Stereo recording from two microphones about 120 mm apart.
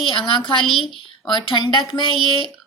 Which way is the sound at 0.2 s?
45° left (ahead or behind).